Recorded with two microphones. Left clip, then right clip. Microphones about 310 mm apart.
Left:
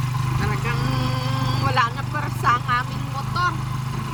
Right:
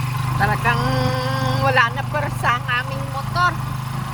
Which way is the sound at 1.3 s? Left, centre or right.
Centre.